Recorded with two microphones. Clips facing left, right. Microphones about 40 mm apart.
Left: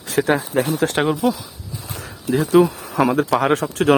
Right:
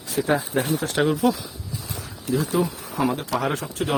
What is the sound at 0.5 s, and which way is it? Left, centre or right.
Speech, left.